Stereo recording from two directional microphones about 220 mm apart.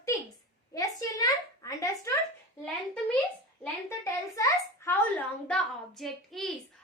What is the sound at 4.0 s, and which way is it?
Speech, 15° left (ahead or behind).